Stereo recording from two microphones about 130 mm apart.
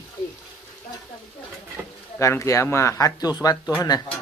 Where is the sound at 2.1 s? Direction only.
20° left (ahead or behind).